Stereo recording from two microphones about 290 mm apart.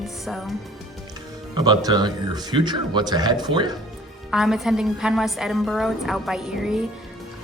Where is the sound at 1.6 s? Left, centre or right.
Centre.